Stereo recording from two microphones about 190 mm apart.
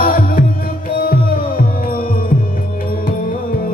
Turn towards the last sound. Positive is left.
turn(degrees=45)  # may be behind; listen again after turning